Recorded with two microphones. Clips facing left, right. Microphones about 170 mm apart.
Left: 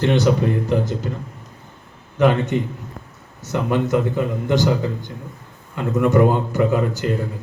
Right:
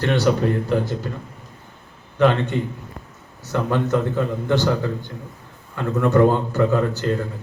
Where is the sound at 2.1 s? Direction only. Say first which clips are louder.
Left 1 dB; 15° left (ahead or behind).